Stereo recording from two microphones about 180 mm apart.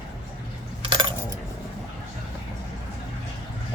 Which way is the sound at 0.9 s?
25° right (ahead or behind).